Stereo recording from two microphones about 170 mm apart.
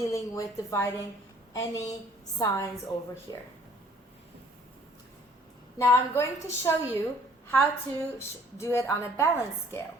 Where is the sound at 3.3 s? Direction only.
20° left (ahead or behind).